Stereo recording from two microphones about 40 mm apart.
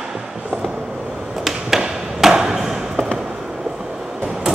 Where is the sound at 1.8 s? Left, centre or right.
Centre.